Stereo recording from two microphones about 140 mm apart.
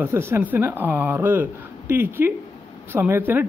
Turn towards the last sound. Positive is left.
turn(degrees=-15)  # may be behind; listen again after turning